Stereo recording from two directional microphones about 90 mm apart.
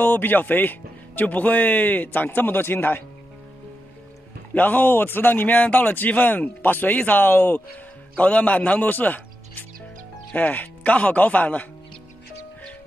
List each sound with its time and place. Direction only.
0.0 s speech: 20° left (ahead or behind)
4.6 s a man's voice: 20° left (ahead or behind)